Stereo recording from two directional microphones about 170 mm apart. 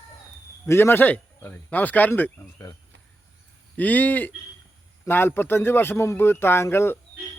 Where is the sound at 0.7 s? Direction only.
15° left (ahead or behind).